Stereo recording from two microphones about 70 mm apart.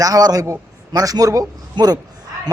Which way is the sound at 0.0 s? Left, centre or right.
Right.